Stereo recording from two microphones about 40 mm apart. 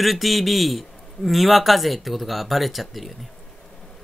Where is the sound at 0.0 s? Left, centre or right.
Centre.